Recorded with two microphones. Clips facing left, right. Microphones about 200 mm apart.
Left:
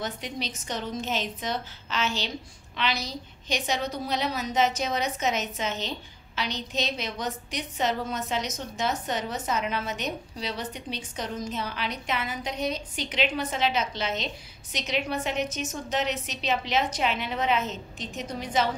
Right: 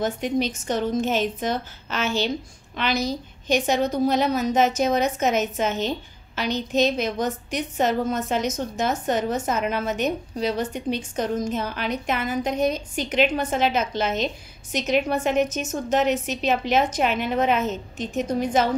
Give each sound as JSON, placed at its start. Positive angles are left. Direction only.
{"t": 0.0, "sound": "a woman's voice", "side_deg": -50}